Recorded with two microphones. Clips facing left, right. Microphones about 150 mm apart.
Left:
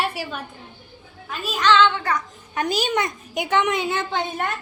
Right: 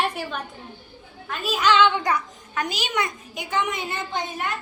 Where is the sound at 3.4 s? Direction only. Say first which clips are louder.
Left 5 dB; 75° left (ahead or behind); by 4.2 s 90° left.